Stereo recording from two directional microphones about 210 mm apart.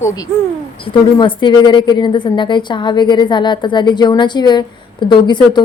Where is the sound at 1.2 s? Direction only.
20° left (ahead or behind).